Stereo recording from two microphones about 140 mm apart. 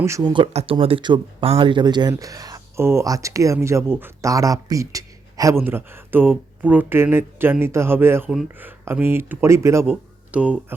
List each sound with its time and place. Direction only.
0.0 s speech: 25° right (ahead or behind)
0.5 s speech: 40° right (ahead or behind); by 10.8 s 10° right (ahead or behind)